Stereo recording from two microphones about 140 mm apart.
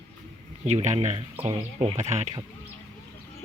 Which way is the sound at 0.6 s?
55° right (ahead or behind).